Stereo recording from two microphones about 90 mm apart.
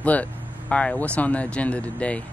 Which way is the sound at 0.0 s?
15° left (ahead or behind).